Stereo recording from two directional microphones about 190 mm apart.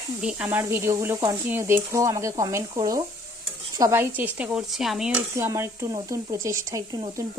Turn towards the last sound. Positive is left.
turn(degrees=-15)  # may be behind; listen again after turning